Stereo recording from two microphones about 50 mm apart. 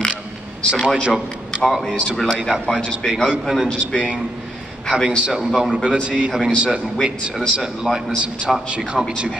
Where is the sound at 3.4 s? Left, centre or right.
Centre.